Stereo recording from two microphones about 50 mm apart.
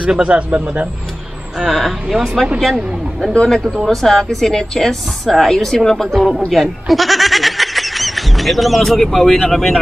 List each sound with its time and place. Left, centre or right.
0.0 s speech: right
1.6 s a woman's voice: centre